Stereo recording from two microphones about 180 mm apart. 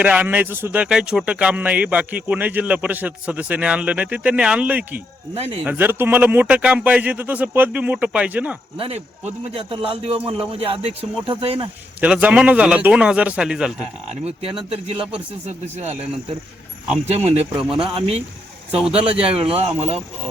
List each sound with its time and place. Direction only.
0.0 s speech: 10° right (ahead or behind)
5.3 s a man's voice: 35° right (ahead or behind)
5.6 s speech: 10° right (ahead or behind)
8.8 s a man's voice: 35° right (ahead or behind)
11.9 s speech: 5° right (ahead or behind)
14.7 s a man's voice: 35° right (ahead or behind)
17.1 s a man's voice: 35° right (ahead or behind)
18.8 s a man's voice: 5° right (ahead or behind)
19.2 s a man's voice: 30° right (ahead or behind)